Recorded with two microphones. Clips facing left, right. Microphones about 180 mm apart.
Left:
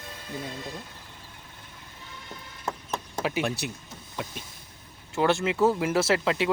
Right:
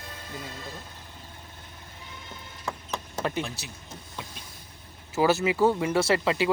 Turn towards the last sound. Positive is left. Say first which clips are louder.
# even
turn(degrees=0)  # may be behind; listen again after turning